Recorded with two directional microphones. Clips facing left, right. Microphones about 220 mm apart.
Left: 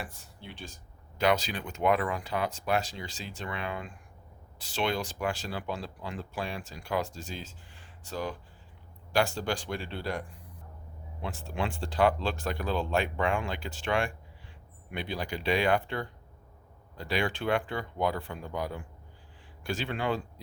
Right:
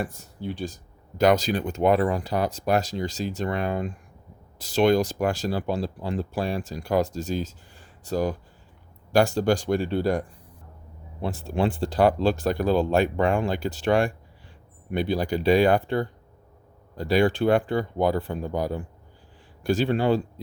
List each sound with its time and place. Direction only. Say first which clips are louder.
0.0 s speech: right 12 dB; 45° right (ahead or behind)